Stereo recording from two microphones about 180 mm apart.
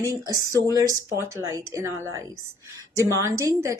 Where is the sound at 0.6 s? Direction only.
20° right (ahead or behind).